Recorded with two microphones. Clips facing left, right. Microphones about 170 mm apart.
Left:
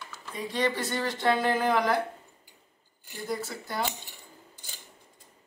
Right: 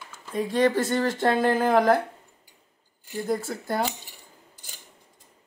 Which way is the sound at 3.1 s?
50° right (ahead or behind).